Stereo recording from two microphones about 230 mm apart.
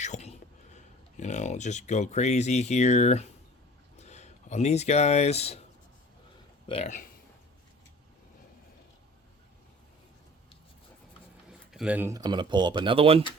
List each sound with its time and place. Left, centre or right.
0.0 s speech: left
6.7 s speech: left
11.4 s speech: centre; by 13.2 s right